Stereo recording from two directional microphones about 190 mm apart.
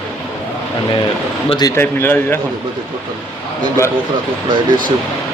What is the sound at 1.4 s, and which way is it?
Speech, 25° left (ahead or behind).